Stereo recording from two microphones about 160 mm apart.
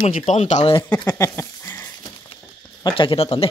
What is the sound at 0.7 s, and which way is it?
Speech, 25° left (ahead or behind).